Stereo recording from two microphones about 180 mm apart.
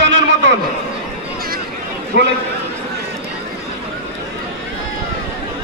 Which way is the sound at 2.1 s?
75° right (ahead or behind).